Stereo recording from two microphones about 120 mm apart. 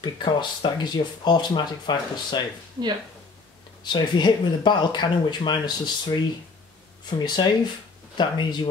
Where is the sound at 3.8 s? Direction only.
40° left (ahead or behind).